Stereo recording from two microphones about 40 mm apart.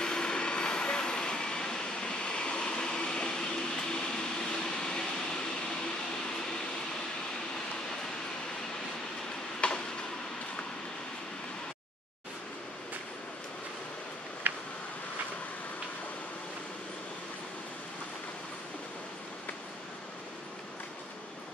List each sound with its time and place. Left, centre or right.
0.0 s vehicle: centre
9.6 s train: left
14.5 s a sound: right